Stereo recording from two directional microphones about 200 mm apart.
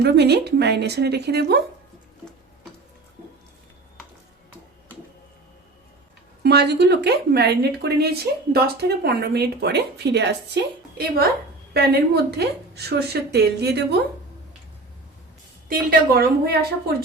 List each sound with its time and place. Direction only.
0.0 s speech: 55° right (ahead or behind)
6.4 s a woman's voice: 55° right (ahead or behind)
15.7 s a woman's voice: 45° right (ahead or behind)